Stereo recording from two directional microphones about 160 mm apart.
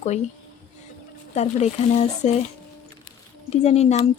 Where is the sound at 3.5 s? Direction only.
40° left (ahead or behind).